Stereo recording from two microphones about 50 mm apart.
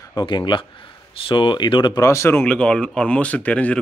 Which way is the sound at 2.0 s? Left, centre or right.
Left.